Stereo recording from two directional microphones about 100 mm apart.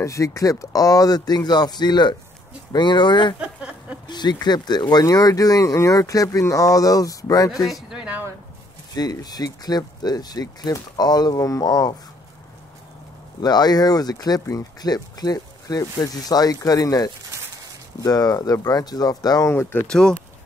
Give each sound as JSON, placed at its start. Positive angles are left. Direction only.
{"t": 0.0, "sound": "speech", "side_deg": 30}
{"t": 3.3, "sound": "a sound", "side_deg": -10}
{"t": 4.1, "sound": "speech", "side_deg": 45}
{"t": 7.6, "sound": "speech", "side_deg": 0}
{"t": 8.0, "sound": "a sound", "side_deg": -15}
{"t": 8.9, "sound": "speech", "side_deg": 40}
{"t": 13.4, "sound": "speech", "side_deg": 45}
{"t": 19.5, "sound": "speech", "side_deg": 25}
{"t": 19.9, "sound": "speech", "side_deg": 5}